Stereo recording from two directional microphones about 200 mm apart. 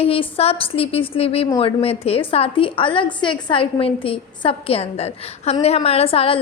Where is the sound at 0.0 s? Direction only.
30° left (ahead or behind).